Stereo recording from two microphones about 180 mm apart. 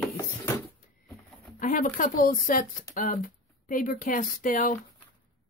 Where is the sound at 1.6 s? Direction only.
45° left (ahead or behind).